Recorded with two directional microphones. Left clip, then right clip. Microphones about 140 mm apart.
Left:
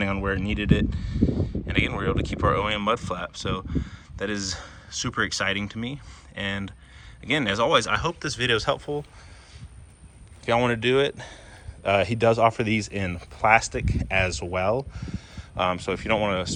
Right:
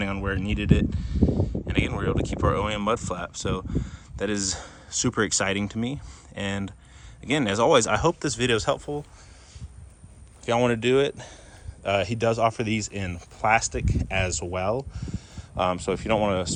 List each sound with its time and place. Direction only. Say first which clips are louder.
0.0 s speech: left 2 dB; 20° right (ahead or behind); by 9.0 s 35° right (ahead or behind)
10.4 s speech: even; 30° right (ahead or behind)